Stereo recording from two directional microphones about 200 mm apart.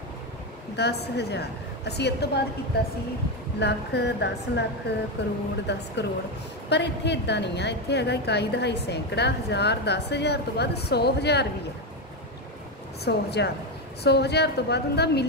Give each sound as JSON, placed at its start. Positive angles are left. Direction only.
{"t": 0.7, "sound": "a woman's voice", "side_deg": 55}
{"t": 3.5, "sound": "a woman's voice", "side_deg": 60}
{"t": 13.0, "sound": "a woman's voice", "side_deg": 55}